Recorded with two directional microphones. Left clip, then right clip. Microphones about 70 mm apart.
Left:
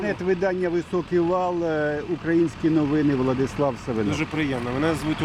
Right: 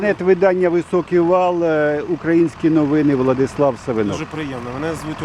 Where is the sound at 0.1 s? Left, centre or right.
Right.